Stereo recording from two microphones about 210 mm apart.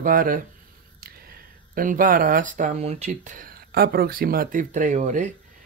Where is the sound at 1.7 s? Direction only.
40° right (ahead or behind).